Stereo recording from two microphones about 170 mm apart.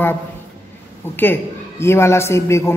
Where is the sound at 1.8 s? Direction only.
15° left (ahead or behind).